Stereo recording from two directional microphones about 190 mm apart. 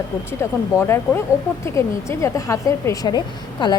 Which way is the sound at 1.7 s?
15° left (ahead or behind).